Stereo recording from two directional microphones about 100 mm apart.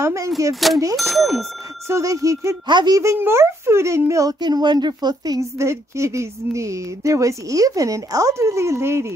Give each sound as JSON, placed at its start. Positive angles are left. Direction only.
{"t": 0.0, "sound": "speech", "side_deg": -30}
{"t": 0.6, "sound": "speech", "side_deg": 0}
{"t": 1.9, "sound": "speech", "side_deg": -30}
{"t": 2.6, "sound": "a woman's voice", "side_deg": -45}
{"t": 3.0, "sound": "speech", "side_deg": -30}